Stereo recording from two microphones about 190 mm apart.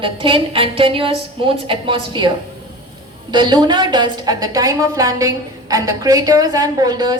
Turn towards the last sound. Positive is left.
turn(degrees=-20)  # may be behind; listen again after turning